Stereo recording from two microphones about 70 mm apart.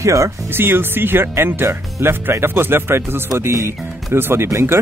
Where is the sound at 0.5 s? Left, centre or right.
Right.